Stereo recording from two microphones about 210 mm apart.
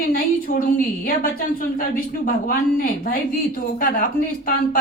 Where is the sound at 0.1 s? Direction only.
40° left (ahead or behind).